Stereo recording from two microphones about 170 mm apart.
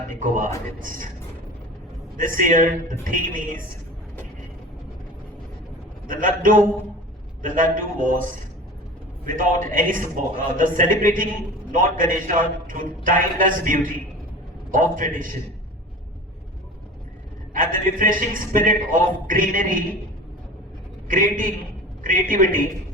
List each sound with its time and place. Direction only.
0.1 s a man's voice: 50° right (ahead or behind)
2.1 s a man's voice: 50° right (ahead or behind)
6.1 s a man's voice: 55° right (ahead or behind)
17.5 s a man's voice: 55° right (ahead or behind)
21.1 s a man's voice: 55° right (ahead or behind)